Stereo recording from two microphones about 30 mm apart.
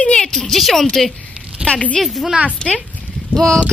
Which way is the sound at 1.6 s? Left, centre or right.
Right.